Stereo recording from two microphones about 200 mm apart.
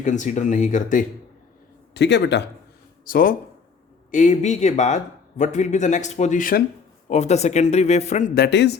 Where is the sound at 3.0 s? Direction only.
45° left (ahead or behind).